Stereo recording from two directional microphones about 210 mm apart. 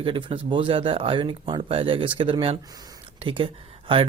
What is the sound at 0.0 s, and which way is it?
Speech, 25° right (ahead or behind).